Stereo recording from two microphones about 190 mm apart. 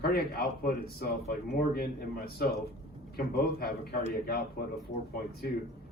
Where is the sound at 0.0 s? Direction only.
55° left (ahead or behind).